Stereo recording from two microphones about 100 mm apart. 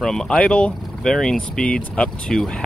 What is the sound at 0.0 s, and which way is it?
Speech, 5° left (ahead or behind).